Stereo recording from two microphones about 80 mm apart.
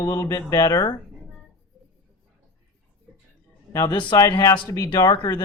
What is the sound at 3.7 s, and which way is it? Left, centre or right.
Speech, left.